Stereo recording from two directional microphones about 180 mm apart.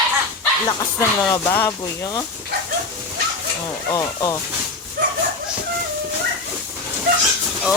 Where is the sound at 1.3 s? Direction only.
15° left (ahead or behind).